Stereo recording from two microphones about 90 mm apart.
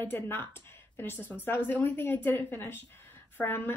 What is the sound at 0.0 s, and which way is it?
A woman's voice, 25° left (ahead or behind).